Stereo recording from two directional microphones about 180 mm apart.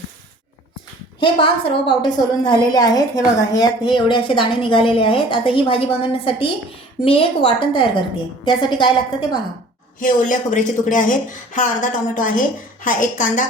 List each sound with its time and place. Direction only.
1.2 s a woman's voice: 30° left (ahead or behind)
10.0 s speech: 45° left (ahead or behind)